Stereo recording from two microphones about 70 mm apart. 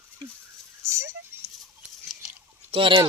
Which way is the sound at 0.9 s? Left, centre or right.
Right.